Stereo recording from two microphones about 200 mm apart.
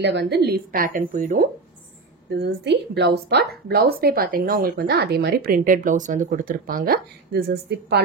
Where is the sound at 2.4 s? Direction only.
55° right (ahead or behind).